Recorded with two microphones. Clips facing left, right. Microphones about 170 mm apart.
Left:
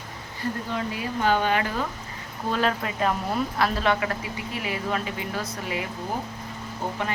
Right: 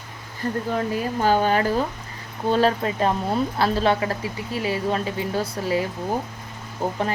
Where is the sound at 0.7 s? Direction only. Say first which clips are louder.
Right 5 dB; 45° right (ahead or behind).